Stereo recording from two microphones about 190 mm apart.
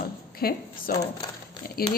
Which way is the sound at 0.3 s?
50° left (ahead or behind).